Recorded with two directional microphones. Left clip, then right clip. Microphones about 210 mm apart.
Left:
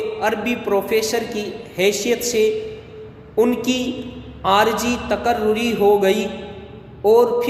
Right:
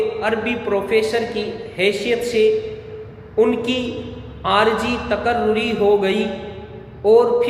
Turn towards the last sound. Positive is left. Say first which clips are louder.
# right 1 dB
turn(degrees=55)  # may be behind; listen again after turning